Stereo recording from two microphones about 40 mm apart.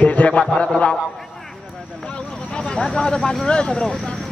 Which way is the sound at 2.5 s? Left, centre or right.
Left.